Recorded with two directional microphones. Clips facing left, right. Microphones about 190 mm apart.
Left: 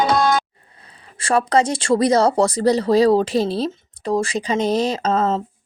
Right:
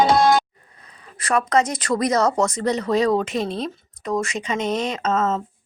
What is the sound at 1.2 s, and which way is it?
Speech, 30° left (ahead or behind).